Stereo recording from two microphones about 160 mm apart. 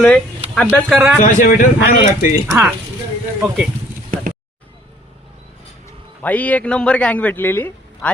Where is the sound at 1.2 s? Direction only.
55° left (ahead or behind).